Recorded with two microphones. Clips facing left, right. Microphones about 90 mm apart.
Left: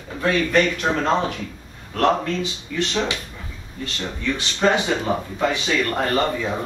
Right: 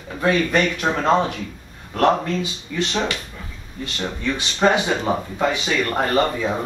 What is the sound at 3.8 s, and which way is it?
Speech, 15° right (ahead or behind).